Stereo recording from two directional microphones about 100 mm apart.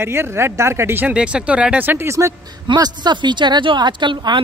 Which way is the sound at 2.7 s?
50° right (ahead or behind).